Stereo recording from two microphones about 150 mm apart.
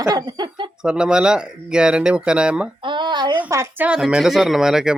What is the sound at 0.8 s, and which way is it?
Speech, 5° right (ahead or behind).